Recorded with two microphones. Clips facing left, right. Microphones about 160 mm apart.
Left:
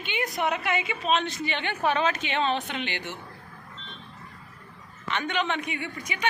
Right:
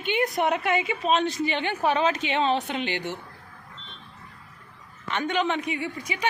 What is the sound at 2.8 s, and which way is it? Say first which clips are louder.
Speech: right 5 dB; 40° right (ahead or behind).